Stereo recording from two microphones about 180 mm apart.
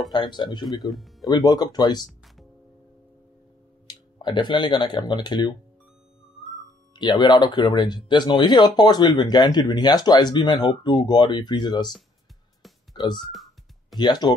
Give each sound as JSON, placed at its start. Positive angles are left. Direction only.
{"t": 0.1, "sound": "speech", "side_deg": 25}
{"t": 0.8, "sound": "music", "side_deg": 0}
{"t": 1.3, "sound": "speech", "side_deg": 20}
{"t": 3.8, "sound": "speech", "side_deg": 25}
{"t": 7.0, "sound": "speech", "side_deg": 25}
{"t": 12.9, "sound": "speech", "side_deg": 25}
{"t": 13.3, "sound": "music", "side_deg": 0}
{"t": 13.9, "sound": "speech", "side_deg": 25}